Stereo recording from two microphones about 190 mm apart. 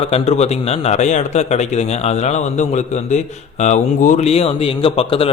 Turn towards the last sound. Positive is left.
turn(degrees=30)  # may be behind; listen again after turning